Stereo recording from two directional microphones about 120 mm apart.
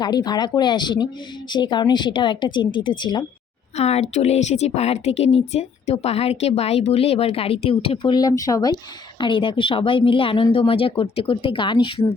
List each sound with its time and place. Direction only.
0.0 s speech: 35° left (ahead or behind)
3.8 s speech: 60° left (ahead or behind)
8.1 s speech: 30° left (ahead or behind)
9.2 s speech: 45° left (ahead or behind)